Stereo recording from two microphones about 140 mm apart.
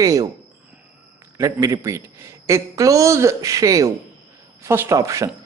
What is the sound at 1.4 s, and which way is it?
A man's voice, 20° right (ahead or behind).